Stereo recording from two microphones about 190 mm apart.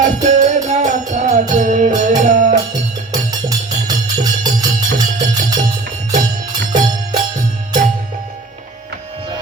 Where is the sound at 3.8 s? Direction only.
20° right (ahead or behind).